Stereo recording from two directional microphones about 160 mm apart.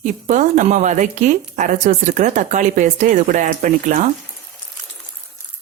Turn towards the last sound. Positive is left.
turn(degrees=-50)  # may be behind; listen again after turning